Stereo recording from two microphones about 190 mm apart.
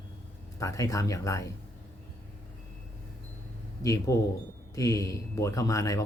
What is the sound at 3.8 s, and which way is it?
Speech, 15° left (ahead or behind).